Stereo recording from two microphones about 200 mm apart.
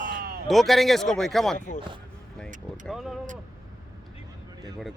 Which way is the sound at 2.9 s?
Centre (ahead or behind).